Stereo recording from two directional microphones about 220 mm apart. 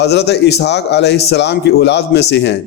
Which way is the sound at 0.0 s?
50° left (ahead or behind).